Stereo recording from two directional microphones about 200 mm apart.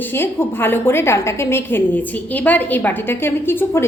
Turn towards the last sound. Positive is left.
turn(degrees=10)  # may be behind; listen again after turning